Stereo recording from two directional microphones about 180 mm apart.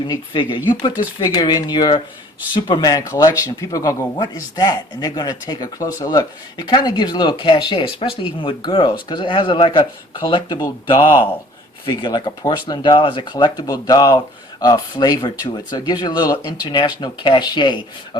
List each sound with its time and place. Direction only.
0.1 s a man's voice: 25° left (ahead or behind)